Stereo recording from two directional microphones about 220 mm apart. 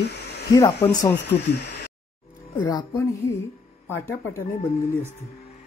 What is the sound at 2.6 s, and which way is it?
Speech, 15° left (ahead or behind).